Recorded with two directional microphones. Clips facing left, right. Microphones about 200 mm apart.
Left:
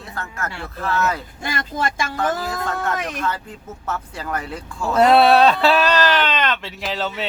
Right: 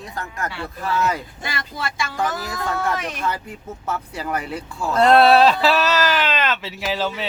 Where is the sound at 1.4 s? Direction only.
50° left (ahead or behind).